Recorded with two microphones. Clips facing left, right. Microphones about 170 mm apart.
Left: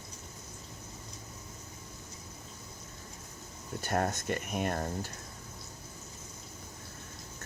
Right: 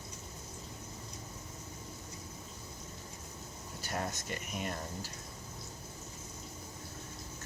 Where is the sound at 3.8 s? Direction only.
55° left (ahead or behind).